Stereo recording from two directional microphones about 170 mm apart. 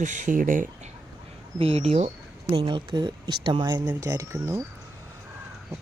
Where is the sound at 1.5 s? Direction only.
35° right (ahead or behind); by 4.6 s 15° right (ahead or behind).